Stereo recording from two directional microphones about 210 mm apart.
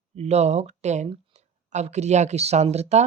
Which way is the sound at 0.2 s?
30° right (ahead or behind).